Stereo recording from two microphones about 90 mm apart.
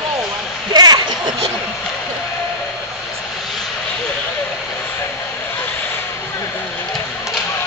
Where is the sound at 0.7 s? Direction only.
50° right (ahead or behind).